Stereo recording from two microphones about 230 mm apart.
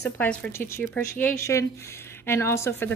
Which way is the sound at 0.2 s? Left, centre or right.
Centre.